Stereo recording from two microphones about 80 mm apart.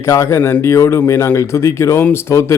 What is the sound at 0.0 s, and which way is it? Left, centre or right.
A man's voice, left.